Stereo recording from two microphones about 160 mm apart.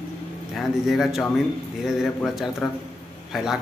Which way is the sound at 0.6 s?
Centre (ahead or behind).